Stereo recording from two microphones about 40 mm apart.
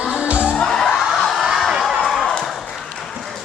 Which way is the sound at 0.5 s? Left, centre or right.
Centre.